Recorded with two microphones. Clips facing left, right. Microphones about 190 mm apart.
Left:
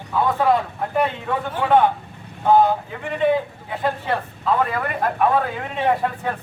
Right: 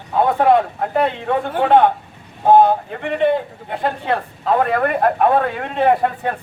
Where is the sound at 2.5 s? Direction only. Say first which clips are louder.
Right 4 dB; 55° right (ahead or behind).